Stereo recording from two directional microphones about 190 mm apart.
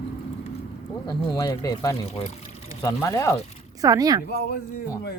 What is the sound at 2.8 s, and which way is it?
Speech, 15° left (ahead or behind).